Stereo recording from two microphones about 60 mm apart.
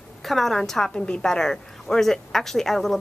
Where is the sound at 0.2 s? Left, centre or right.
Centre.